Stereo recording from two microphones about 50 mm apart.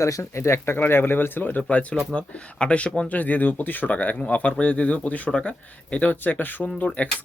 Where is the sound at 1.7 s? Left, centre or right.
Left.